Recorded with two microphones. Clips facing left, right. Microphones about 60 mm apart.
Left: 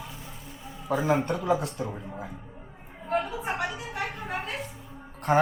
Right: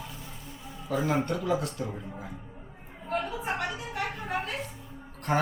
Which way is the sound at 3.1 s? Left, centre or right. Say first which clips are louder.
Left 2 dB; centre.